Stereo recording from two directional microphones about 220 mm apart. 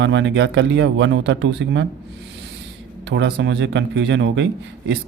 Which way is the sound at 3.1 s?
50° right (ahead or behind).